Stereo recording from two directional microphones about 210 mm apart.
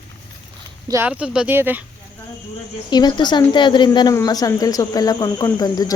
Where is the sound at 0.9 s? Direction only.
10° right (ahead or behind).